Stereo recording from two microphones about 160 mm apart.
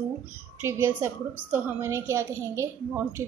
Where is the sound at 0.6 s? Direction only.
15° right (ahead or behind).